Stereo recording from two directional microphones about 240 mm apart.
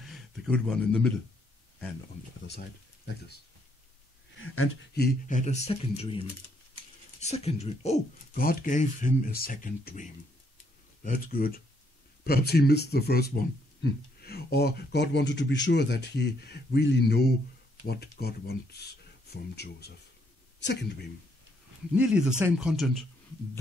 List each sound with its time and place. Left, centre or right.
0.0 s speech: centre
4.9 s speech: left
21.9 s speech: centre